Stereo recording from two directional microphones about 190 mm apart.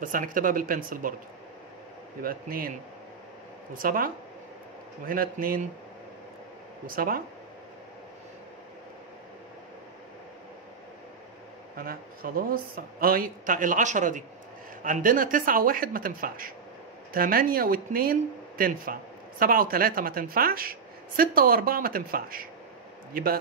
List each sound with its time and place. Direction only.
0.0 s speech: 45° right (ahead or behind)
2.2 s speech: 50° right (ahead or behind)
3.7 s speech: 45° right (ahead or behind)
6.9 s speech: 50° right (ahead or behind)
11.7 s speech: 50° right (ahead or behind)